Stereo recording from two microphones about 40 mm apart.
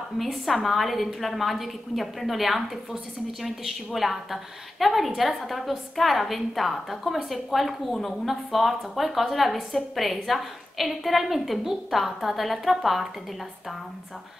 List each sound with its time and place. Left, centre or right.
0.2 s a woman's voice: centre